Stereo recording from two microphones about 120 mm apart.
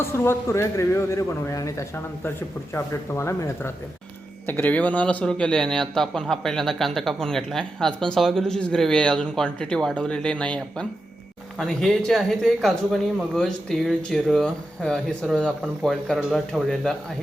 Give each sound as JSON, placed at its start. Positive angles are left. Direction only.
{"t": 0.0, "sound": "a man's voice", "side_deg": 20}